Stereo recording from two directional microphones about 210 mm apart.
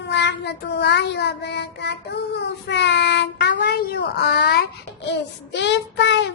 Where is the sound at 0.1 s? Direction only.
55° left (ahead or behind).